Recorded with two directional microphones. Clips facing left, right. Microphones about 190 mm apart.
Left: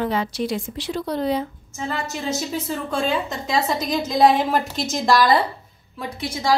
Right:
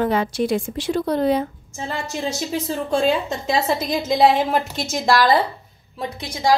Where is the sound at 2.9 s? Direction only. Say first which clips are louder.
Right 5 dB; 30° right (ahead or behind).